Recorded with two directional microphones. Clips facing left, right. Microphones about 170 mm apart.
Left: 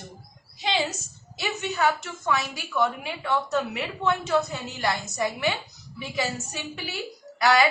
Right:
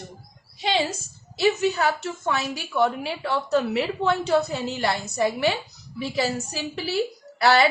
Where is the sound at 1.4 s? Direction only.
30° right (ahead or behind).